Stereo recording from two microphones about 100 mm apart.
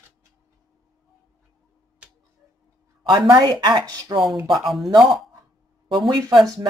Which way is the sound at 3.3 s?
40° right (ahead or behind).